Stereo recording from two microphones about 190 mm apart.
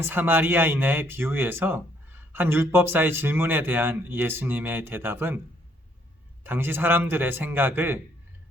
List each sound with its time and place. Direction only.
0.0 s a man's voice: 10° right (ahead or behind)
6.4 s a man's voice: 10° right (ahead or behind)